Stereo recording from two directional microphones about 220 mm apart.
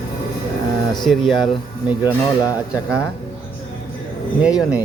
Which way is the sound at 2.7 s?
15° left (ahead or behind).